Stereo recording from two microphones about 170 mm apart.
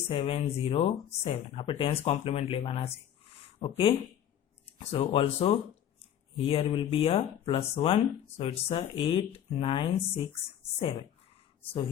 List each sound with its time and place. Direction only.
0.1 s speech: 35° left (ahead or behind)